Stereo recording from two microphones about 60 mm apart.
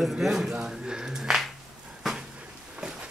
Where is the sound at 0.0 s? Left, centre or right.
Centre.